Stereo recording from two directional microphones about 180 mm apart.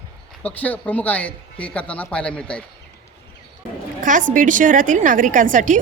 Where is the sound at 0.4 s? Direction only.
10° left (ahead or behind).